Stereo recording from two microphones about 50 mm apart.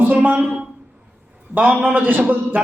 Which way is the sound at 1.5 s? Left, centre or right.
Right.